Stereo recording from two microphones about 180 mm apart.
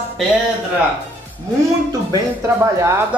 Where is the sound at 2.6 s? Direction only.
15° right (ahead or behind).